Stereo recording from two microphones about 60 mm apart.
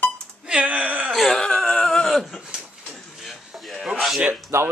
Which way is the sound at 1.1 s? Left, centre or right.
Centre.